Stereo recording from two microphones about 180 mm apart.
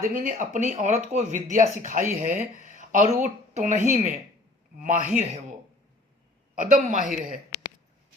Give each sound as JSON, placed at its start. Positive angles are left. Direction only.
{"t": 0.1, "sound": "speech", "side_deg": -50}
{"t": 2.4, "sound": "speech", "side_deg": 40}
{"t": 2.7, "sound": "a sound", "side_deg": -45}
{"t": 3.2, "sound": "speech", "side_deg": -45}
{"t": 6.6, "sound": "speech", "side_deg": -50}